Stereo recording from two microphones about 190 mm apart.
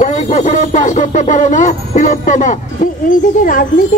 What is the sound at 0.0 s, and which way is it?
Speech, 40° left (ahead or behind).